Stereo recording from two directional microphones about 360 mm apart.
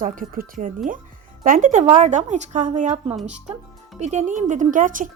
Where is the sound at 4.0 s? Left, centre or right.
Centre.